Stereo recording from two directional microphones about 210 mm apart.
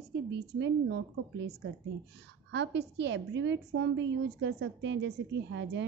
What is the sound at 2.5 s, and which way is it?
A woman's voice, 55° right (ahead or behind).